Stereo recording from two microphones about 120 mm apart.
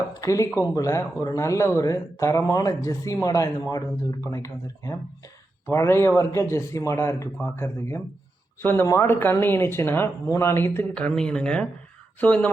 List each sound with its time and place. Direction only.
0.1 s speech: 30° left (ahead or behind); by 12.5 s 10° left (ahead or behind)